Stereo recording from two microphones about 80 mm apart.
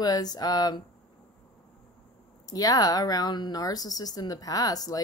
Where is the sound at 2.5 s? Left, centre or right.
Left.